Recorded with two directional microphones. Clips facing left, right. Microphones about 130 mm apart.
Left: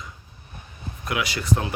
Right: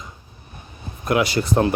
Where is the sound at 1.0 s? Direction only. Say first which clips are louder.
Right 7 dB; 35° right (ahead or behind).